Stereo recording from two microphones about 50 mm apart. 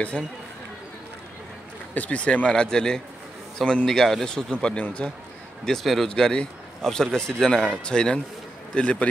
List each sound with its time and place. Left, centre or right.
0.2 s speech: centre
2.0 s a man's voice: left
3.8 s speech: centre; by 5.1 s left
5.7 s speech: centre; by 9.1 s left